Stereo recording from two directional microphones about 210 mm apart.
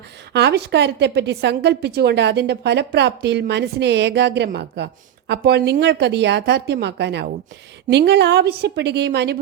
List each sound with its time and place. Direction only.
0.3 s a woman's voice: 55° right (ahead or behind)